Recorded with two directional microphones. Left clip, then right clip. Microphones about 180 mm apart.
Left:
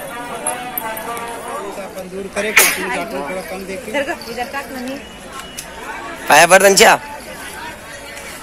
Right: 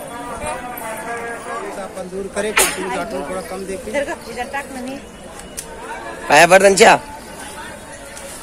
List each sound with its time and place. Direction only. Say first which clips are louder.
2.3 s speech: left 4 dB; 15° right (ahead or behind)
3.9 s speech: left 2 dB; 45° left (ahead or behind)
6.2 s a man's voice: left 1 dB; centre (ahead or behind)